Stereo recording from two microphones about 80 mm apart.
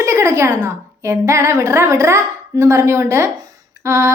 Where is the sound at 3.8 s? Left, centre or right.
Right.